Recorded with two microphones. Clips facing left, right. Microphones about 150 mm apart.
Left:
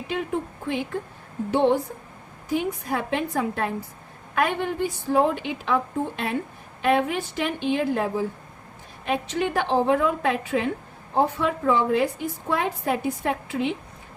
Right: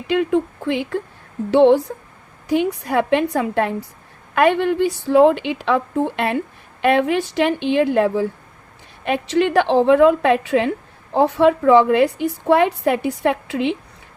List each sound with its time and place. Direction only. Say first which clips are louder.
0.1 s a woman's voice: right 10 dB; 90° right; by 6.4 s 70° right (ahead or behind)
6.8 s a woman's voice: right 5 dB; 80° right